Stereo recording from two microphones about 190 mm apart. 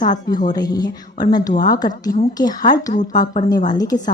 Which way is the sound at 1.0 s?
45° left (ahead or behind).